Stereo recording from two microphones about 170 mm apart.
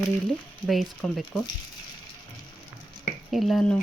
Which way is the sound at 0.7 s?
5° left (ahead or behind).